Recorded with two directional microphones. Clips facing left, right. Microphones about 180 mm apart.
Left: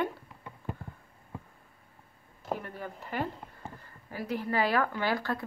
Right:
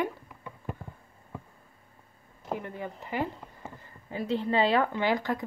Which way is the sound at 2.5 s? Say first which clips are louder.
Right 1 dB; 20° right (ahead or behind).